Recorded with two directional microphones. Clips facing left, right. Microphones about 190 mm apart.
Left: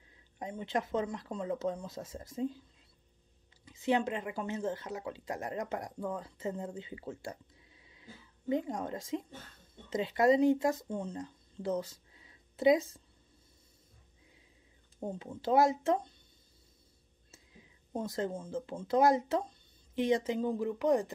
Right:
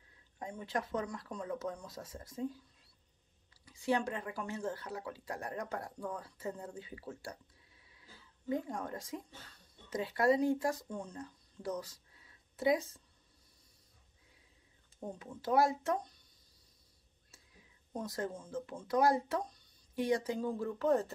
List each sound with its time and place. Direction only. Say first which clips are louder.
0.4 s speech: left 4 dB; 20° left (ahead or behind)
3.6 s speech: left 3 dB; 20° left (ahead or behind)
15.0 s speech: left 5 dB; 25° left (ahead or behind)
17.3 s speech: left 6 dB; 25° left (ahead or behind)